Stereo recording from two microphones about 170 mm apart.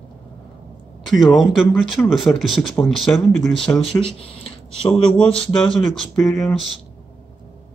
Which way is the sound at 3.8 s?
35° left (ahead or behind).